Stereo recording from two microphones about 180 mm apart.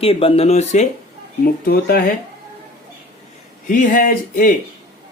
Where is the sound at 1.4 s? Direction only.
55° left (ahead or behind).